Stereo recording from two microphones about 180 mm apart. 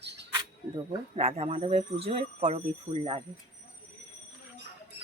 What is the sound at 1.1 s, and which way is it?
Speech, 35° right (ahead or behind).